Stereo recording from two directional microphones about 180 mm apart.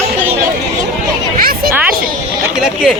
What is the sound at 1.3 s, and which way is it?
Speech, 55° right (ahead or behind).